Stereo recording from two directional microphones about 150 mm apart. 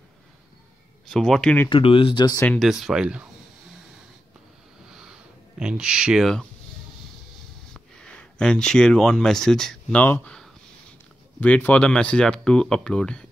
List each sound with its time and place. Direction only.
1.0 s speech: centre (ahead or behind)
1.7 s speech: 35° left (ahead or behind)
2.4 s speech: 10° left (ahead or behind)
2.7 s speech: 5° right (ahead or behind)
5.6 s speech: 5° right (ahead or behind)
7.7 s speech: 5° left (ahead or behind)